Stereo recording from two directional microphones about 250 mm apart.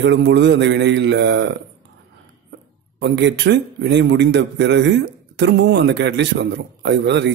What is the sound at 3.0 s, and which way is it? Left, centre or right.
A man's voice, right.